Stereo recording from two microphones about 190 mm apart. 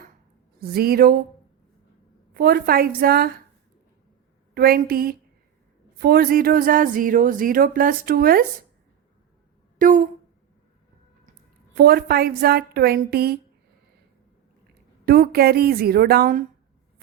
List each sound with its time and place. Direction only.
0.6 s speech: 55° right (ahead or behind)
2.3 s speech: 55° right (ahead or behind)
4.5 s speech: 50° right (ahead or behind)
9.7 s a sound: 45° right (ahead or behind)
11.7 s a woman's voice: 55° right (ahead or behind)
15.0 s speech: 55° right (ahead or behind)